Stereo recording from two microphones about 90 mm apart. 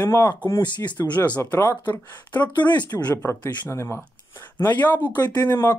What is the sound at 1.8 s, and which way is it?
Speech, 20° left (ahead or behind).